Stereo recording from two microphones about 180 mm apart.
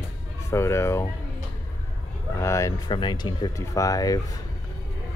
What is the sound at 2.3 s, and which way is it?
Speech, 15° left (ahead or behind).